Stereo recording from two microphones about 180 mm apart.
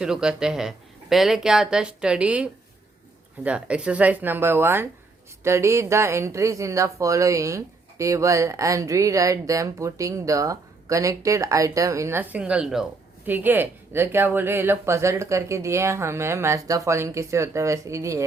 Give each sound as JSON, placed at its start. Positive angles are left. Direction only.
{"t": 0.0, "sound": "speech", "side_deg": -5}